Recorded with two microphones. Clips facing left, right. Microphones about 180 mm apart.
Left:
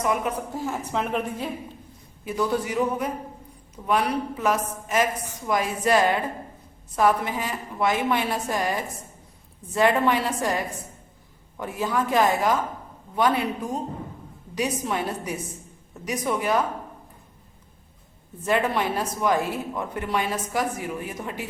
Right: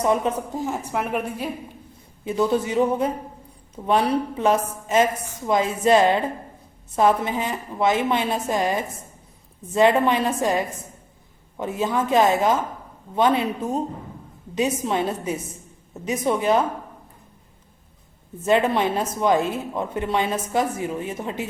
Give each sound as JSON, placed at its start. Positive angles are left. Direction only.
{"t": 0.0, "sound": "a woman's voice", "side_deg": -30}
{"t": 0.6, "sound": "a woman's voice", "side_deg": -15}
{"t": 2.2, "sound": "a woman's voice", "side_deg": -25}
{"t": 18.4, "sound": "a woman's voice", "side_deg": -20}